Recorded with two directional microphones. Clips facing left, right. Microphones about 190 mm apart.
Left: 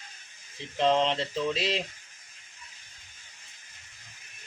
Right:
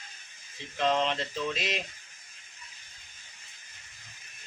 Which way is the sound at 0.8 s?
25° left (ahead or behind).